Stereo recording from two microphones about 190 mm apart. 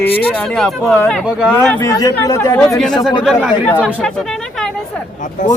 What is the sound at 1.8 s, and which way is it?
Speech, 20° left (ahead or behind).